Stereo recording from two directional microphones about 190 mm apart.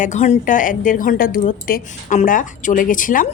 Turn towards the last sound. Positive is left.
turn(degrees=45)  # may be behind; listen again after turning